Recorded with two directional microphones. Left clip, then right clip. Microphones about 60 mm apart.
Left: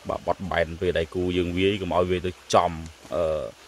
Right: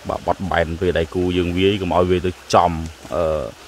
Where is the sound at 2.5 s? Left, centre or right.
Right.